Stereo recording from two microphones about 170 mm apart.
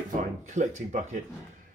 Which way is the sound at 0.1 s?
45° right (ahead or behind).